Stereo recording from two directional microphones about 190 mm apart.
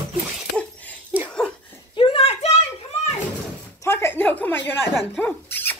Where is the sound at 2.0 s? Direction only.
30° left (ahead or behind).